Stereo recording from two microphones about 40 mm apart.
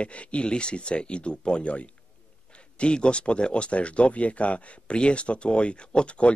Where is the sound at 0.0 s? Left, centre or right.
Left.